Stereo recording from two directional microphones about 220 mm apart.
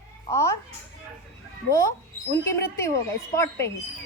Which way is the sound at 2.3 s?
10° left (ahead or behind).